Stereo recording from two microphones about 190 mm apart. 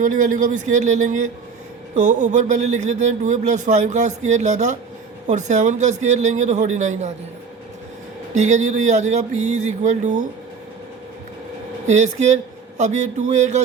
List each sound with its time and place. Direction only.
0.0 s speech: 45° right (ahead or behind)
8.4 s speech: 40° right (ahead or behind)
11.9 s speech: 35° right (ahead or behind)